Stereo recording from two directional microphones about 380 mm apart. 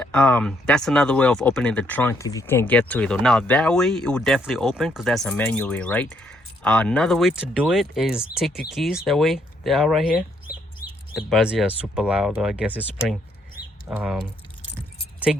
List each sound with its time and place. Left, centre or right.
0.0 s speech: centre
10.8 s chicken: left
11.3 s speech: centre
15.3 s speech: centre